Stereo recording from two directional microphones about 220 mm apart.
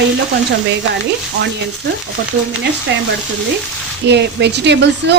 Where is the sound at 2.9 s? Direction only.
55° right (ahead or behind).